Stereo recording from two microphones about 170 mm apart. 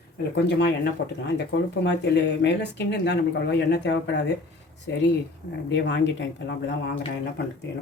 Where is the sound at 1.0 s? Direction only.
90° left.